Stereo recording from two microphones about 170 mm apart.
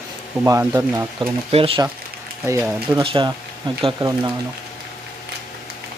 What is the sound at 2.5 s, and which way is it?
Speech, 15° right (ahead or behind).